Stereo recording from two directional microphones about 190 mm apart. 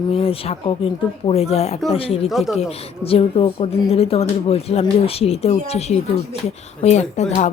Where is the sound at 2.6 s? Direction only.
30° left (ahead or behind).